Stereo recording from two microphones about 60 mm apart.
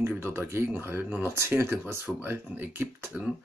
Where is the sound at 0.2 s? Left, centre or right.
Right.